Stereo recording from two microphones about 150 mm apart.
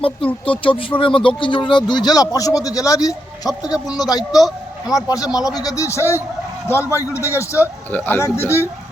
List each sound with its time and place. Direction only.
0.6 s speech: 35° left (ahead or behind)
4.2 s a man's voice: centre (ahead or behind)
4.9 s a man's voice: 25° left (ahead or behind)